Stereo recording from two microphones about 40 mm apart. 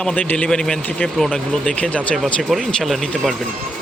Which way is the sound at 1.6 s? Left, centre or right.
Left.